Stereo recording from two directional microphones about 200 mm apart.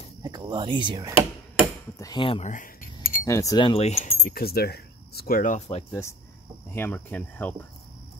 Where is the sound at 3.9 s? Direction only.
40° left (ahead or behind).